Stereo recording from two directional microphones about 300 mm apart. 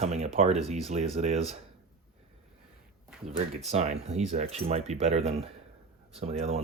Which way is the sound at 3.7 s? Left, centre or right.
Right.